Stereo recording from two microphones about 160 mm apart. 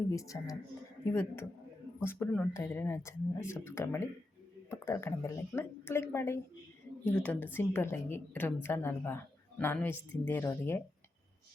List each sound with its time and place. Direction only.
0.1 s speech: 20° left (ahead or behind)
2.0 s a woman's voice: 15° left (ahead or behind)